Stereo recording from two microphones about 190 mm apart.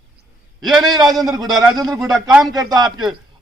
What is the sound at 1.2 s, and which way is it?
A man's voice, 20° right (ahead or behind).